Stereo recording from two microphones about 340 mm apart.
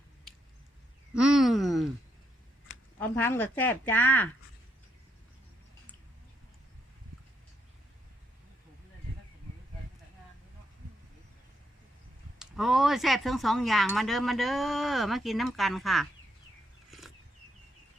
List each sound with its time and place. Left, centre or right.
1.1 s a sound: centre
3.0 s speech: centre
12.4 s speech: centre